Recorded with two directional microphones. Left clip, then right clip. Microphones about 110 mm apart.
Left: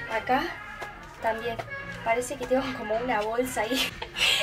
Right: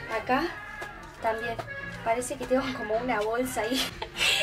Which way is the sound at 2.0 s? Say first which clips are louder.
Left 1 dB; centre (ahead or behind).